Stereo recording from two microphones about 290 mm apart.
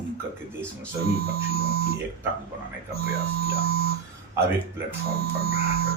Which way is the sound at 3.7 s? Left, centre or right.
Left.